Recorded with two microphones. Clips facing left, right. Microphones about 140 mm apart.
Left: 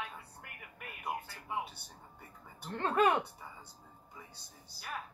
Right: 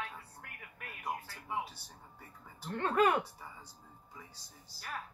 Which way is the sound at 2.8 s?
20° left (ahead or behind).